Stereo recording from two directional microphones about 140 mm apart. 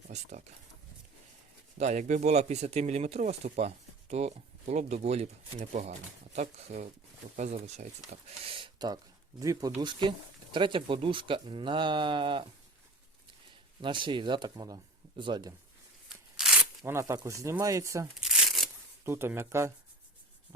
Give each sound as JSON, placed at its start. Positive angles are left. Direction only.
{"t": 0.1, "sound": "speech", "side_deg": -55}
{"t": 1.8, "sound": "speech", "side_deg": -55}
{"t": 8.4, "sound": "speech", "side_deg": -35}
{"t": 13.8, "sound": "speech", "side_deg": -35}
{"t": 16.0, "sound": "a sound", "side_deg": -5}
{"t": 16.8, "sound": "speech", "side_deg": -20}
{"t": 18.2, "sound": "crumpling", "side_deg": -5}
{"t": 19.0, "sound": "speech", "side_deg": -15}